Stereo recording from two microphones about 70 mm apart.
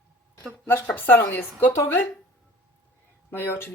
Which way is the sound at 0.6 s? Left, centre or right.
Left.